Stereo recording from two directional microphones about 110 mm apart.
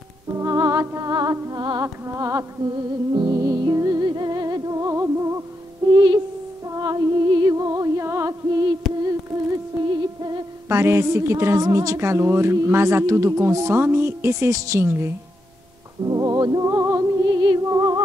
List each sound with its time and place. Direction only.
0.4 s music: 30° right (ahead or behind)
2.1 s music: 30° right (ahead or behind)
2.7 s music: 40° right (ahead or behind)
5.9 s music: 40° right (ahead or behind)
9.8 s music: 40° right (ahead or behind)
10.7 s speech: 25° right (ahead or behind)
16.0 s music: 35° right (ahead or behind)
16.7 s music: 25° right (ahead or behind)
17.3 s music: 40° right (ahead or behind)
17.6 s music: 30° right (ahead or behind)